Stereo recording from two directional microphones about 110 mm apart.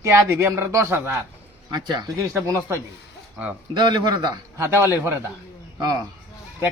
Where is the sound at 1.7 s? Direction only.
40° right (ahead or behind).